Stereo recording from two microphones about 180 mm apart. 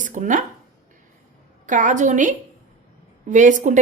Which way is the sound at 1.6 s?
45° right (ahead or behind).